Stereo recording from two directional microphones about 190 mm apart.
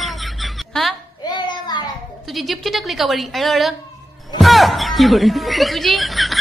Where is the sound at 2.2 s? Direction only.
Centre (ahead or behind).